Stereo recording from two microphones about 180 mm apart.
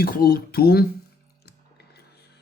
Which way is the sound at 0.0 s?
55° left (ahead or behind).